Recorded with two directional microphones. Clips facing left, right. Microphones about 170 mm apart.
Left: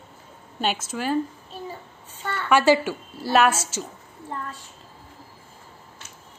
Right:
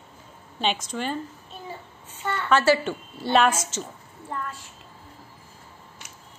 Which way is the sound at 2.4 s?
15° left (ahead or behind).